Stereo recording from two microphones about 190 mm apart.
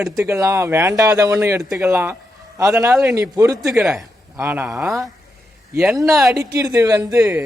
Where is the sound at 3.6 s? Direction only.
Centre (ahead or behind).